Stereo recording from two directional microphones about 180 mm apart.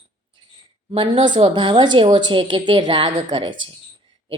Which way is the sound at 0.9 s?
30° right (ahead or behind).